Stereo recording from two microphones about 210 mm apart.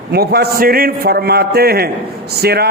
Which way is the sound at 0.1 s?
50° right (ahead or behind).